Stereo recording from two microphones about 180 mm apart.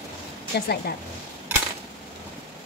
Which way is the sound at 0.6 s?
60° left (ahead or behind).